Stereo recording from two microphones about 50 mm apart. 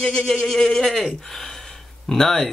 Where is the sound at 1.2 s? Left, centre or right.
Centre.